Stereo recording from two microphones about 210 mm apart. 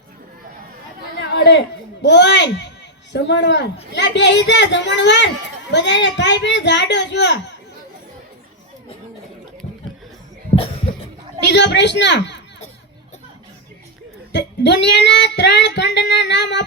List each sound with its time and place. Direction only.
1.3 s speech: 55° left (ahead or behind)
5.7 s child singing: 60° left (ahead or behind)
11.4 s child singing: 55° left (ahead or behind)
14.3 s child singing: 55° left (ahead or behind)